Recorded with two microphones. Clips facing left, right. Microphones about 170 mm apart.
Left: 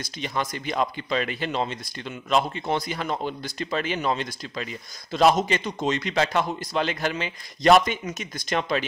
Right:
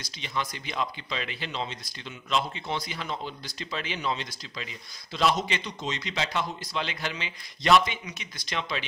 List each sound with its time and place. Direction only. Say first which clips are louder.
0.0 s speech: left 5 dB; 50° left (ahead or behind)